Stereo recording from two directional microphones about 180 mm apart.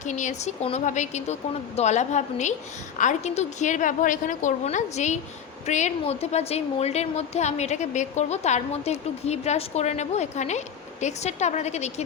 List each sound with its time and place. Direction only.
0.0 s a woman's voice: 40° left (ahead or behind)